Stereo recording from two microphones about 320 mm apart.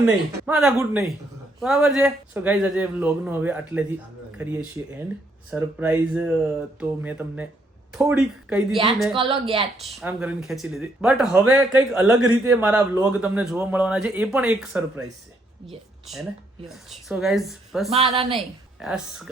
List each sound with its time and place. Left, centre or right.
0.0 s speech: centre
9.1 s speech: centre
9.7 s speech: centre
16.6 s speech: centre
17.9 s a woman's voice: centre
18.3 s a woman's voice: centre